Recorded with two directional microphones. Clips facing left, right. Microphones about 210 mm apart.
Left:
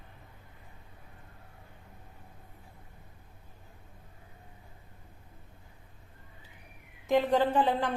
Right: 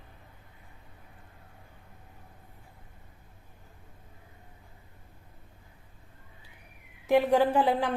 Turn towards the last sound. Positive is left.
turn(degrees=-10)  # may be behind; listen again after turning